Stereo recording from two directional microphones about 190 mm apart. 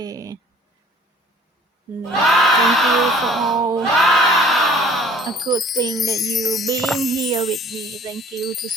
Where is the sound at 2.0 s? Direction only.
Centre (ahead or behind).